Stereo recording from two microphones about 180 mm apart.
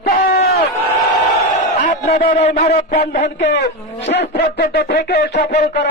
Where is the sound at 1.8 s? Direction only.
45° left (ahead or behind).